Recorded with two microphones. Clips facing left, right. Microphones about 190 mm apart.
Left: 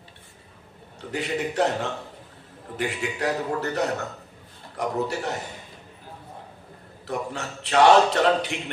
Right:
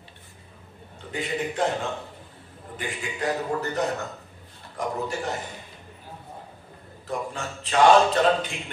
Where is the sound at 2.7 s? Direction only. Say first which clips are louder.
Left 4 dB; 70° left (ahead or behind).